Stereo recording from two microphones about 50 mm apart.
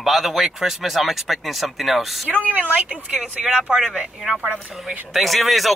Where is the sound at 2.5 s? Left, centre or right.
Right.